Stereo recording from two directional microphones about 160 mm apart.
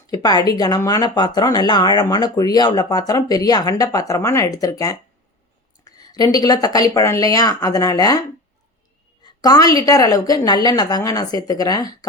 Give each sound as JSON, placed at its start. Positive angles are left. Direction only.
{"t": 0.1, "sound": "speech", "side_deg": 25}
{"t": 9.2, "sound": "speech", "side_deg": 25}